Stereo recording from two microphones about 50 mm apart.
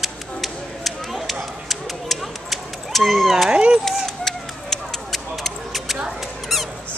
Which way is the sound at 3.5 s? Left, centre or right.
Right.